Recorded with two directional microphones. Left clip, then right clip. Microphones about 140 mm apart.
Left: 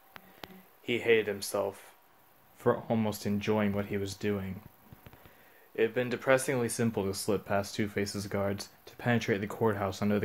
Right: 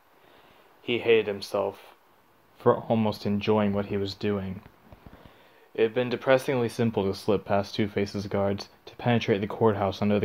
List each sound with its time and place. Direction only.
0.8 s speech: 30° right (ahead or behind)
5.8 s speech: 30° right (ahead or behind)